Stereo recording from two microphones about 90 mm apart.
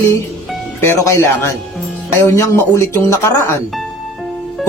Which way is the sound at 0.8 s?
30° left (ahead or behind).